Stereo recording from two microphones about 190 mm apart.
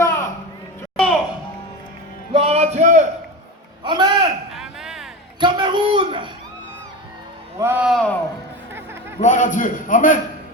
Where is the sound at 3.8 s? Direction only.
25° right (ahead or behind).